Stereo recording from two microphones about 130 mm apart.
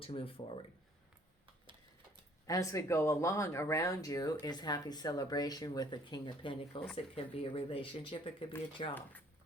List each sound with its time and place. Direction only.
0.0 s speech: 45° left (ahead or behind)
2.5 s speech: 25° left (ahead or behind); by 8.9 s 50° left (ahead or behind)